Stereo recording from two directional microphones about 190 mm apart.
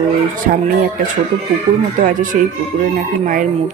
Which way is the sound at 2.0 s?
45° right (ahead or behind).